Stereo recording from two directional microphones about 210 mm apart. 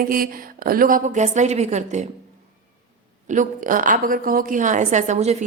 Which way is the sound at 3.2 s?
35° right (ahead or behind).